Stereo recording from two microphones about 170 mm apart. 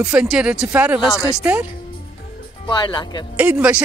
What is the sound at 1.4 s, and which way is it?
Speech, 10° right (ahead or behind).